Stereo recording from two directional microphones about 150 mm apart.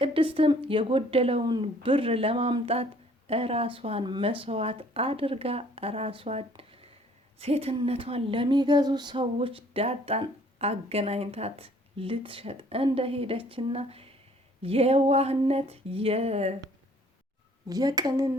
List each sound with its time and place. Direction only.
0.0 s speech: 35° right (ahead or behind)
17.7 s speech: 25° right (ahead or behind)